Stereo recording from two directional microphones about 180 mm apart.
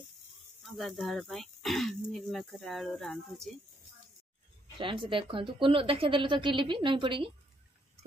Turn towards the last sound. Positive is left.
turn(degrees=-30)  # may be behind; listen again after turning